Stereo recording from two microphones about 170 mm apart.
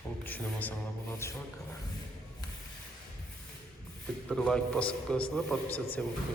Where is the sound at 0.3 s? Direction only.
10° left (ahead or behind).